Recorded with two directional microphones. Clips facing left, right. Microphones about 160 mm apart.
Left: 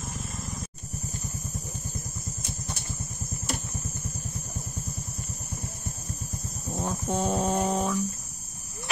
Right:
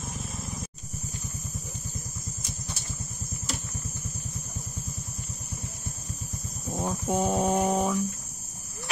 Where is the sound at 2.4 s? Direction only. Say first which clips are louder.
Left 3 dB; 55° left (ahead or behind).